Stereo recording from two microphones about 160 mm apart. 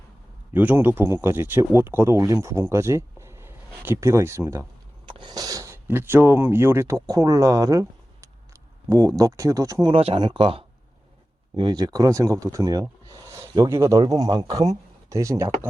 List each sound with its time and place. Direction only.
0.5 s speech: 10° right (ahead or behind)
5.0 s speech: 30° right (ahead or behind)
9.9 s speech: 35° right (ahead or behind); by 12.8 s 20° right (ahead or behind)
13.1 s a sound: 20° right (ahead or behind)
13.6 s speech: 20° right (ahead or behind)